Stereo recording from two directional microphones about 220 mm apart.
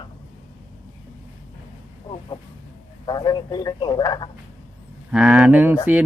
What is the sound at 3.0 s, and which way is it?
Speech, 20° left (ahead or behind).